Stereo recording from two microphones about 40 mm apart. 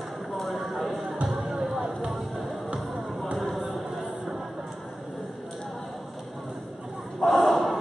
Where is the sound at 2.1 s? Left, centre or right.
Centre.